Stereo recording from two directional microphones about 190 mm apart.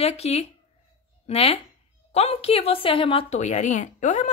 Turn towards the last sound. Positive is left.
turn(degrees=40)  # may be behind; listen again after turning